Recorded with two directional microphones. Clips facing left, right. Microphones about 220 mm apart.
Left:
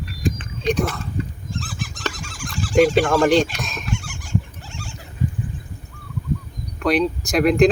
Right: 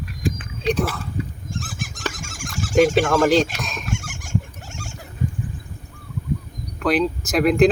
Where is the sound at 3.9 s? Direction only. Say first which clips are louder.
Left 1 dB; 50° right (ahead or behind).